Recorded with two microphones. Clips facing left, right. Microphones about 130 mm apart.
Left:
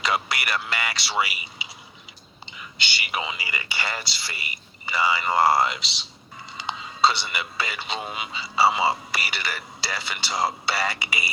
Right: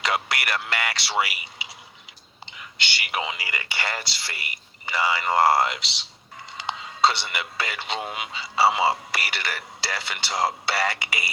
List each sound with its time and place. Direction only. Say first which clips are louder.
0.0 s speech: even; 75° right (ahead or behind)